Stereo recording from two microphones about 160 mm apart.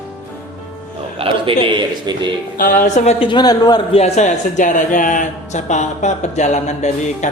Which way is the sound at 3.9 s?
45° left (ahead or behind).